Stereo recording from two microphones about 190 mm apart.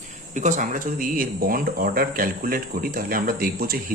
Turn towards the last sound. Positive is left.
turn(degrees=-50)  # may be behind; listen again after turning